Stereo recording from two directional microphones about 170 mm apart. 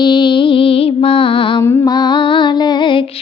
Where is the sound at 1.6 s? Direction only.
15° left (ahead or behind).